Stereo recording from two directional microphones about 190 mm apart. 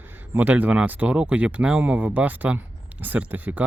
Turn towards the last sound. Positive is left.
turn(degrees=-10)  # may be behind; listen again after turning